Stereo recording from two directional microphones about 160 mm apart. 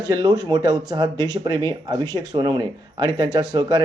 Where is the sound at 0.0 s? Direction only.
25° right (ahead or behind).